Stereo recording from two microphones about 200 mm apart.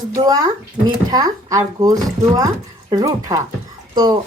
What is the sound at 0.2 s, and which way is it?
Speech, 20° right (ahead or behind).